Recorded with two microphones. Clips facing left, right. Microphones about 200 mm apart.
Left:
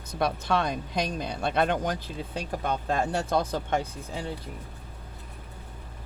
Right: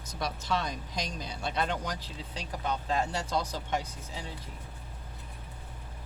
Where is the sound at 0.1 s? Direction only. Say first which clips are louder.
Left 6 dB; 60° left (ahead or behind).